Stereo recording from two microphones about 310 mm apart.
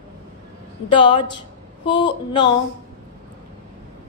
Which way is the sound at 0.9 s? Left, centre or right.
Centre.